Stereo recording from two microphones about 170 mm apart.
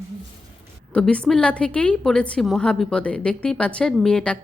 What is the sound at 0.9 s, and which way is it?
A woman's voice, 5° left (ahead or behind).